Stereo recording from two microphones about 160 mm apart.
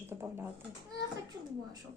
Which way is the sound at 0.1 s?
20° right (ahead or behind).